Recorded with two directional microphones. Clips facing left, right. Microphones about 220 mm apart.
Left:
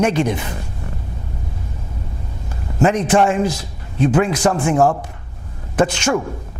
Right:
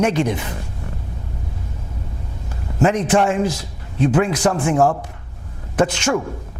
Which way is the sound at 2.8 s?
30° left (ahead or behind).